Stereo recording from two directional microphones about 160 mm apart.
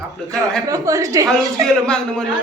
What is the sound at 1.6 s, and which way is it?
Speech, 5° left (ahead or behind).